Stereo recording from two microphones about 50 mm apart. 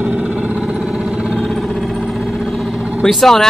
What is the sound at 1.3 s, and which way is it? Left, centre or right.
Vehicle, centre.